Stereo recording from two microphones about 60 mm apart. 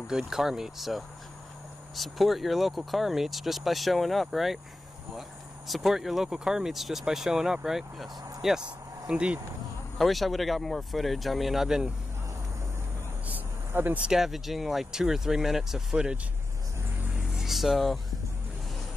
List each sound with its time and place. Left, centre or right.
0.0 s speech: centre
5.7 s speech: centre
9.9 s speech: centre
13.3 s a sound: right
14.0 s speech: centre
17.4 s speech: centre